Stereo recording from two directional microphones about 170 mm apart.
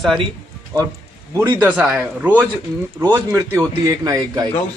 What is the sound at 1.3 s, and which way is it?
A man's voice, 15° right (ahead or behind).